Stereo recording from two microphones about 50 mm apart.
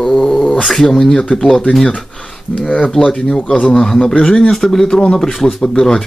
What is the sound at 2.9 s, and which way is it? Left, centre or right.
Speech, centre.